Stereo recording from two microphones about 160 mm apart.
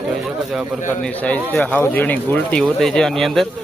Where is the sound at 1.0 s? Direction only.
5° left (ahead or behind).